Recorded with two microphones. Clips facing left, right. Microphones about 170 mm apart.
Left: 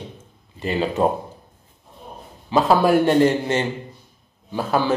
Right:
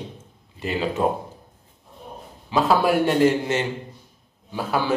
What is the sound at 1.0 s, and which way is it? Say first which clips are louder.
Speech: left 3 dB; 30° left (ahead or behind).